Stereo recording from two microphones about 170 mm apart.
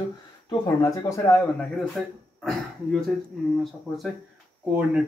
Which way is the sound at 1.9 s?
Centre (ahead or behind).